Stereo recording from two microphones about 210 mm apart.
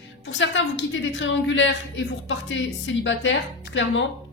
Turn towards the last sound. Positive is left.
turn(degrees=65)  # may be behind; listen again after turning